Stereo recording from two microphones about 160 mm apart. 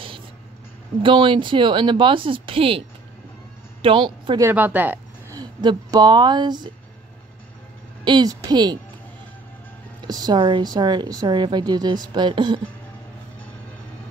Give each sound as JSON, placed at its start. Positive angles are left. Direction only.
{"t": 1.0, "sound": "speech", "side_deg": -30}
{"t": 3.8, "sound": "speech", "side_deg": -30}
{"t": 4.4, "sound": "a woman's voice", "side_deg": -15}
{"t": 5.3, "sound": "speech", "side_deg": -25}
{"t": 8.0, "sound": "a woman's voice", "side_deg": -25}
{"t": 10.0, "sound": "a woman's voice", "side_deg": -25}